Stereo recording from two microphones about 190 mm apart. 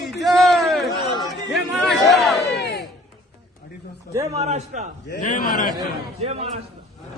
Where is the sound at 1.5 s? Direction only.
Centre (ahead or behind).